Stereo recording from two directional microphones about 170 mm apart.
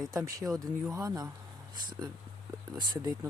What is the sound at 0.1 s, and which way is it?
Speech, 20° right (ahead or behind).